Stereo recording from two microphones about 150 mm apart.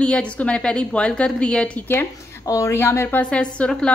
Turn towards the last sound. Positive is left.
turn(degrees=5)  # may be behind; listen again after turning